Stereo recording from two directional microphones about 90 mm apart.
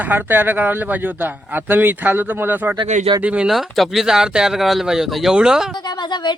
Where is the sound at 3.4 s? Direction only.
Centre (ahead or behind).